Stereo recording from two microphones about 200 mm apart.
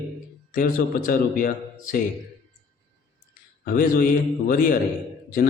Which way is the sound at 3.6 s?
45° left (ahead or behind).